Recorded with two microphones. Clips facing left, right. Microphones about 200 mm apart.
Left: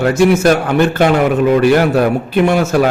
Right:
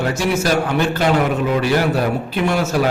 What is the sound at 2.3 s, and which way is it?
Speech, 50° left (ahead or behind).